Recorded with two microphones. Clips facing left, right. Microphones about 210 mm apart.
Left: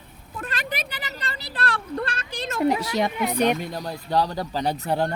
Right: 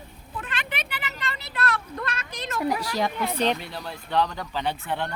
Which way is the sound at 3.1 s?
15° left (ahead or behind).